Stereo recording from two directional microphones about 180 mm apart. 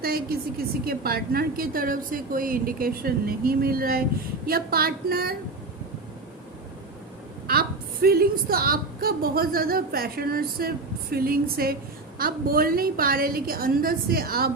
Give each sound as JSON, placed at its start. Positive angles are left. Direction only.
{"t": 0.0, "sound": "a woman's voice", "side_deg": -55}
{"t": 8.0, "sound": "a woman's voice", "side_deg": -60}